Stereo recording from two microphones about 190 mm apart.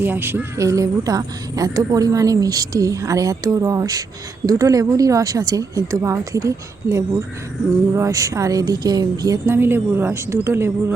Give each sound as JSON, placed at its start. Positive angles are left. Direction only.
{"t": 0.0, "sound": "speech", "side_deg": -10}